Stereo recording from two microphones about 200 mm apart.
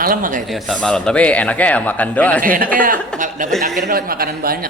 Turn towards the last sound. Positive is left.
turn(degrees=-50)  # may be behind; listen again after turning